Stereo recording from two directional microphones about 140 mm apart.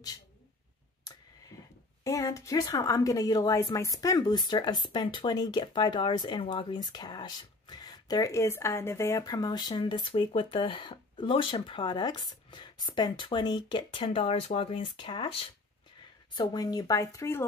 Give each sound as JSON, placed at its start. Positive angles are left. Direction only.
{"t": 2.0, "sound": "speech", "side_deg": 25}